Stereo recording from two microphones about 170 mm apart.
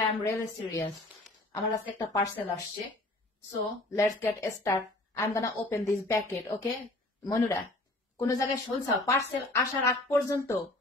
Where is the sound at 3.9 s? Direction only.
15° left (ahead or behind).